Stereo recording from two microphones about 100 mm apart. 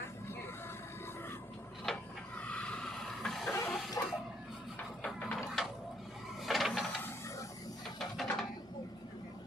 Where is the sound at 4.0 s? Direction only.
30° left (ahead or behind).